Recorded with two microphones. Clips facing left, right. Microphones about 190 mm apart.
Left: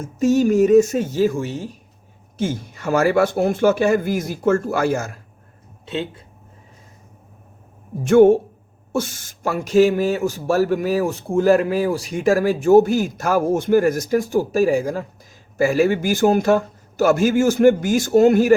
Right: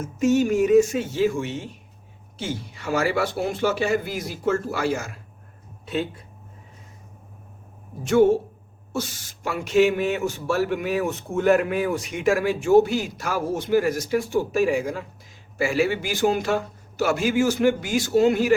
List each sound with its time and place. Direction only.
0.0 s a man's voice: 35° left (ahead or behind)
5.8 s speech: 25° left (ahead or behind)
8.0 s a man's voice: 55° left (ahead or behind)